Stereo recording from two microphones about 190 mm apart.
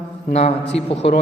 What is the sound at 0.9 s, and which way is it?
Speech, 30° left (ahead or behind).